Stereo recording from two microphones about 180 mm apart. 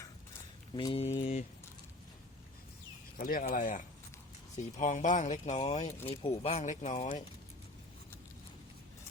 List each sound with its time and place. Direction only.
0.7 s mantra: 25° left (ahead or behind)
1.2 s speech: 40° left (ahead or behind)
3.2 s speech: 55° left (ahead or behind); by 7.2 s 35° left (ahead or behind)